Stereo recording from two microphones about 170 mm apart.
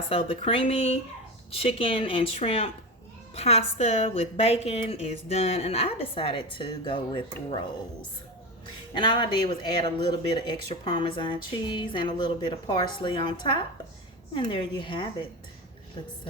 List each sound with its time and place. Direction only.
0.1 s a woman's voice: 35° left (ahead or behind)
9.0 s speech: 30° left (ahead or behind)